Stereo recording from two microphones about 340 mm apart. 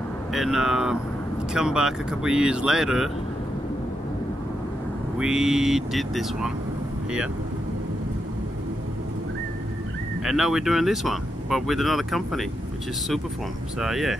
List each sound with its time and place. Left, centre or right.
0.3 s speech: centre
5.2 s speech: centre
10.2 s speech: centre
13.7 s speech: centre